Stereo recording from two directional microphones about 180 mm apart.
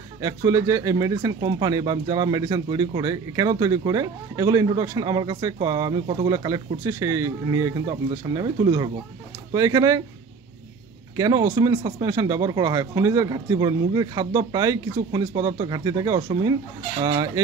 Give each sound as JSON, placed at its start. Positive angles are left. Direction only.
{"t": 0.2, "sound": "speech", "side_deg": -20}
{"t": 11.1, "sound": "speech", "side_deg": -20}